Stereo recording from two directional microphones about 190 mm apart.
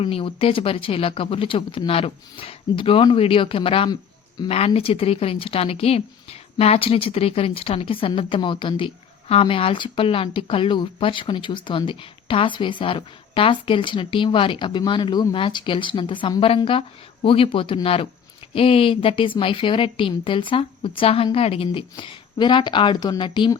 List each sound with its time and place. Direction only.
0.0 s speech: 30° left (ahead or behind)